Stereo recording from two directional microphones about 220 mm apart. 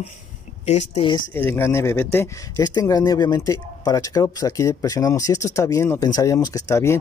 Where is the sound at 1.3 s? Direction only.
10° left (ahead or behind).